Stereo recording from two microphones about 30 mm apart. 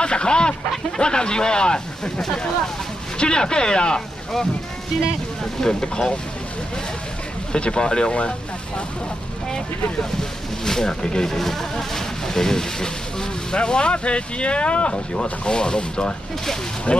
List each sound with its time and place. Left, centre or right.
0.0 s speech: left
5.6 s speech: left
7.5 s speech: left
8.1 s speech: left
10.6 s speech: left
11.3 s speech: centre
13.5 s speech: left
15.4 s speech: left